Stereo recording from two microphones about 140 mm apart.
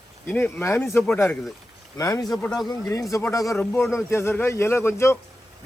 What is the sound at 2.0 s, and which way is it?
Speech, 25° left (ahead or behind).